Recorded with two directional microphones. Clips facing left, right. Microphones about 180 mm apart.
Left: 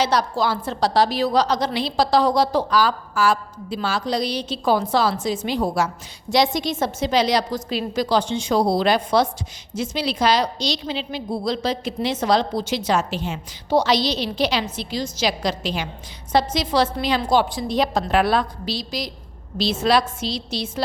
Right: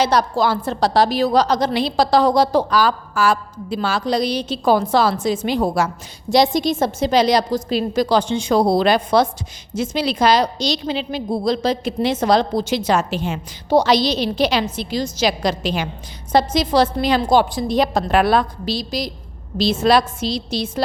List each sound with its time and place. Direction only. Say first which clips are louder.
0.0 s a woman's voice: right 3 dB; 50° right (ahead or behind)
6.3 s a woman's voice: right 4 dB; 35° right (ahead or behind)